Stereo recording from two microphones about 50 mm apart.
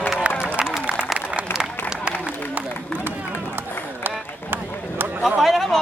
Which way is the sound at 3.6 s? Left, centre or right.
Right.